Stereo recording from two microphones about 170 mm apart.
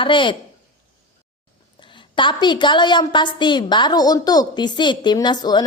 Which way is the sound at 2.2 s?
25° left (ahead or behind).